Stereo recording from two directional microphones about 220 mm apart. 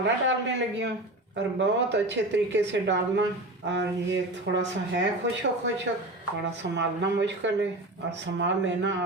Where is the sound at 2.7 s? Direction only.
55° right (ahead or behind).